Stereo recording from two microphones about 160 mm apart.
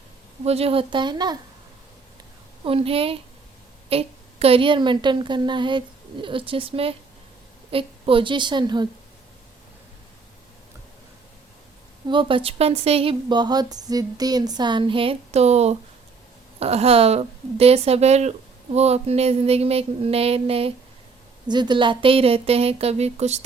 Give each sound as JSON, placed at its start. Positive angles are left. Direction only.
{"t": 0.4, "sound": "a woman's voice", "side_deg": -40}
{"t": 2.6, "sound": "a woman's voice", "side_deg": -35}
{"t": 12.0, "sound": "a woman's voice", "side_deg": -30}